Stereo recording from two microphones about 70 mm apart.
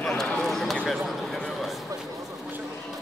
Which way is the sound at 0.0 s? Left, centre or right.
Centre.